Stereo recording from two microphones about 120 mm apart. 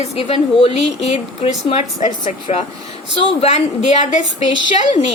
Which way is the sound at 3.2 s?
60° left (ahead or behind).